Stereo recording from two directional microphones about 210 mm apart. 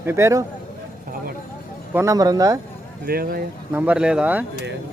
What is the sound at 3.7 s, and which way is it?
Speech, 5° right (ahead or behind).